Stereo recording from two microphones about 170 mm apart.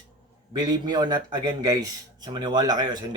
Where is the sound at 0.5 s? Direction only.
25° right (ahead or behind).